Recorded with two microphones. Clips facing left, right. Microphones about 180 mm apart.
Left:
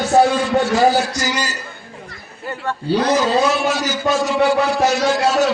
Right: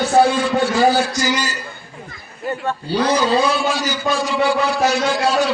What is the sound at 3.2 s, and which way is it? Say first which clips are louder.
A man's voice: left 1 dB; 45° left (ahead or behind).